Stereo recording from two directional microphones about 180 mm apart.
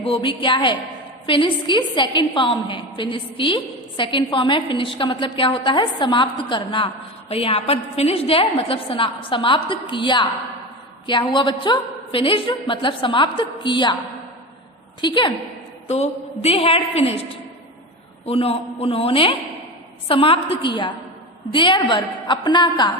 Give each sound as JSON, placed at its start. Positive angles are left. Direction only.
{"t": 0.0, "sound": "a woman's voice", "side_deg": 30}
{"t": 15.0, "sound": "a woman's voice", "side_deg": 25}
{"t": 15.9, "sound": "a woman's voice", "side_deg": 35}
{"t": 18.3, "sound": "a woman's voice", "side_deg": 35}